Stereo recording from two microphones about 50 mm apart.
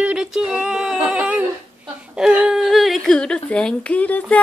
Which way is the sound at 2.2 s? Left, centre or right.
Centre.